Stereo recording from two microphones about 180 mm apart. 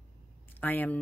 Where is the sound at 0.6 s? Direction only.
10° left (ahead or behind).